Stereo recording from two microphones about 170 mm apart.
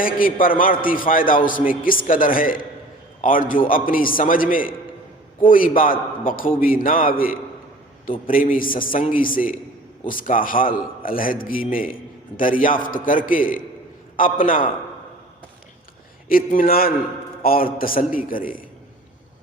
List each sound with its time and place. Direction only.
0.0 s a man's voice: 55° left (ahead or behind)
16.3 s a man's voice: 55° left (ahead or behind)